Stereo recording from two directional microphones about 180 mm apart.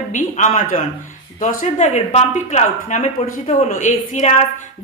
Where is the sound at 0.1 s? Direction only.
45° left (ahead or behind).